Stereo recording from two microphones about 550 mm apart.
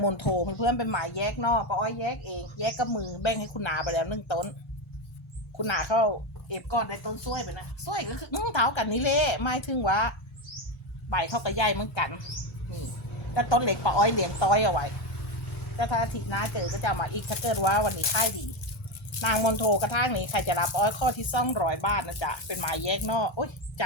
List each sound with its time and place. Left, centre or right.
0.0 s speech: left
5.5 s speech: left
13.3 s speech: left